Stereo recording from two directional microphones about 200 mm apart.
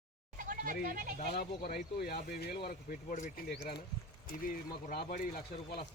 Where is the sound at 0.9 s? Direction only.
40° right (ahead or behind).